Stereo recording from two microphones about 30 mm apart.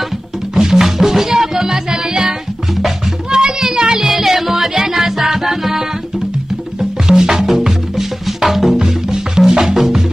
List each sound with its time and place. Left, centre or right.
0.6 s music: centre
3.3 s child singing: right
4.2 s music: centre
8.7 s music: right
9.8 s music: centre